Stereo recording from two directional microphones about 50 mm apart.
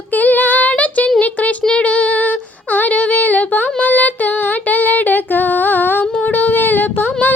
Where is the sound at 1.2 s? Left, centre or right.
Left.